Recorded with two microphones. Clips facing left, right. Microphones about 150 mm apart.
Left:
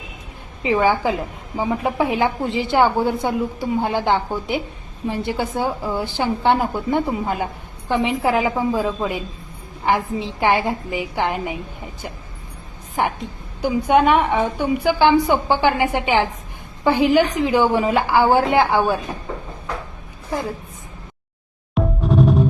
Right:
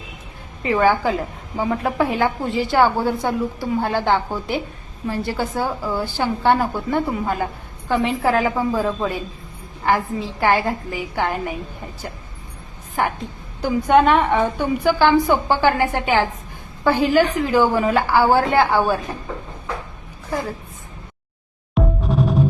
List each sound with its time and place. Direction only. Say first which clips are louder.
0.6 s a woman's voice: even; 15° left (ahead or behind)
13.6 s a woman's voice: right 1 dB; 15° left (ahead or behind)
21.8 s music: left 2 dB; centre (ahead or behind)